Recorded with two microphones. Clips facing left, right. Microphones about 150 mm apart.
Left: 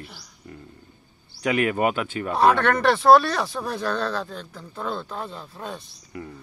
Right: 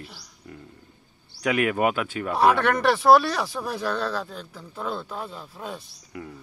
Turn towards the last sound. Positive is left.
turn(degrees=-5)  # may be behind; listen again after turning